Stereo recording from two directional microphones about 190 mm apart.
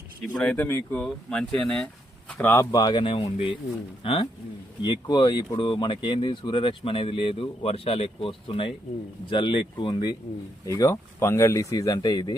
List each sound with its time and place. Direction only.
0.2 s speech: 5° left (ahead or behind); by 12.4 s 20° left (ahead or behind)